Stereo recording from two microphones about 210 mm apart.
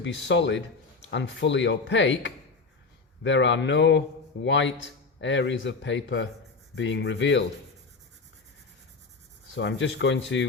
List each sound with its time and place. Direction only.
0.0 s speech: 60° left (ahead or behind)
9.6 s speech: 60° left (ahead or behind)